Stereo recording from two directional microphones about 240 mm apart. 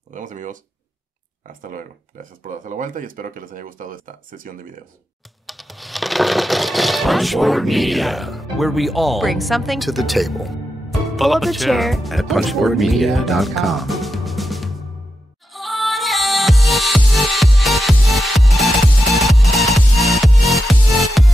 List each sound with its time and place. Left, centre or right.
0.1 s speech: right
2.4 s speech: right
5.5 s speech: centre
15.5 s music: centre